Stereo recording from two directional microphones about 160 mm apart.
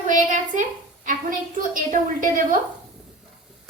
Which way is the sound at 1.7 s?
55° right (ahead or behind).